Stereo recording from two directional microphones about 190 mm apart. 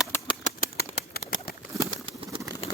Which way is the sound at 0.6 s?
55° left (ahead or behind).